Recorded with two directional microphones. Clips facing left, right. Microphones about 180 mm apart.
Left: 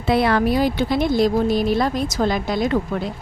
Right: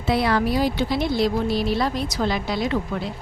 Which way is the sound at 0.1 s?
55° left (ahead or behind).